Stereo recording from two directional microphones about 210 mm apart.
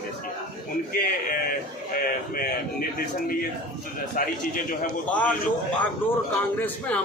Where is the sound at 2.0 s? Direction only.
45° left (ahead or behind).